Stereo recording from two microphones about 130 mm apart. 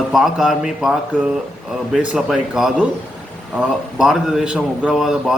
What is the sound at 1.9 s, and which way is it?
A man's voice, 5° right (ahead or behind).